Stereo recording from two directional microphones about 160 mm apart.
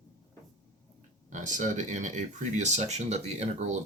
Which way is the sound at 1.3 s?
50° right (ahead or behind).